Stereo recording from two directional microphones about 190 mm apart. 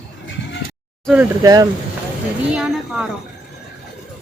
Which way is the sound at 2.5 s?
5° right (ahead or behind).